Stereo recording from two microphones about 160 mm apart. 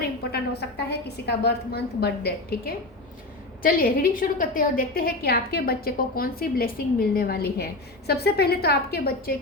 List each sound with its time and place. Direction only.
0.8 s a woman's voice: 90° left
3.6 s a woman's voice: 65° left (ahead or behind)